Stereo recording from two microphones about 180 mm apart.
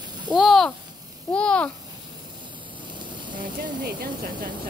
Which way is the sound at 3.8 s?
55° right (ahead or behind).